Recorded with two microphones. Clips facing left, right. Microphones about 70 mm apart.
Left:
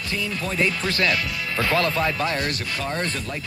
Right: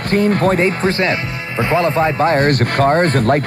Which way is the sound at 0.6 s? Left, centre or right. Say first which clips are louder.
Right 7 dB; right.